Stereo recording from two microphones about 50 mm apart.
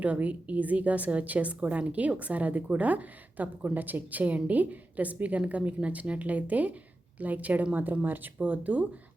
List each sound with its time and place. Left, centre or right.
0.0 s a woman's voice: right